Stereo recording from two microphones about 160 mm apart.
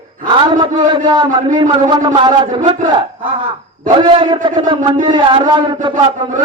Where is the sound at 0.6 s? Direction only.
25° right (ahead or behind).